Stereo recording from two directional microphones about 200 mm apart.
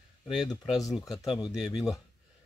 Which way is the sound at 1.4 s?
5° right (ahead or behind).